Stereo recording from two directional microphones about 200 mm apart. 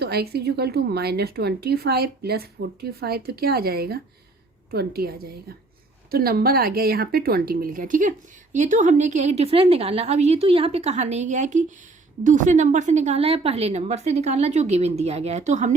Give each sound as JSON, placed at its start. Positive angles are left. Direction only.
{"t": 0.0, "sound": "a woman's voice", "side_deg": -55}